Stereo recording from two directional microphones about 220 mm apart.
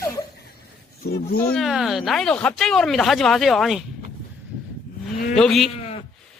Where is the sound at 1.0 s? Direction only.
45° left (ahead or behind).